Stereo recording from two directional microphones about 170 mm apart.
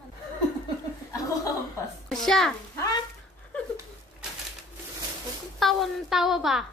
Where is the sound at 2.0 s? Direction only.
Centre (ahead or behind).